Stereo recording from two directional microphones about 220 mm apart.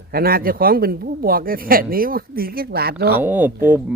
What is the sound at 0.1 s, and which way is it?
Speech, 40° right (ahead or behind).